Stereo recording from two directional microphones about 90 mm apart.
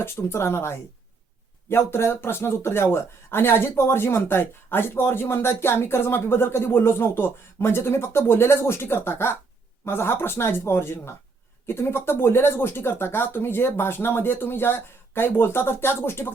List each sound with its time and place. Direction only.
0.0 s speech: 30° left (ahead or behind)